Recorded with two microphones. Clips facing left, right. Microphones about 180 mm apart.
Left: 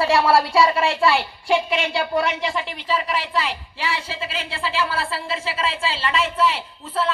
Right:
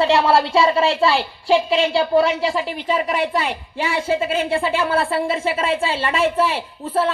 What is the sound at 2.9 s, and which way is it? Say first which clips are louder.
A man's voice: right 3 dB; 50° right (ahead or behind).